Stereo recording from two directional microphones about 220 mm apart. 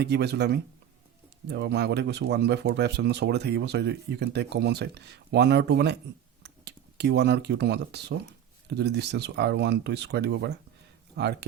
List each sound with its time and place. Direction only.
0.0 s speech: 50° right (ahead or behind)